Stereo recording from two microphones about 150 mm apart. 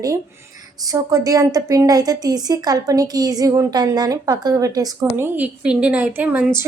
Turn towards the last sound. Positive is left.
turn(degrees=-10)  # may be behind; listen again after turning